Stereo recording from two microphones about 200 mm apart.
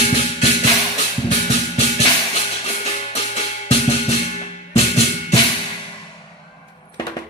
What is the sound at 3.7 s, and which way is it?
Drum, 30° left (ahead or behind).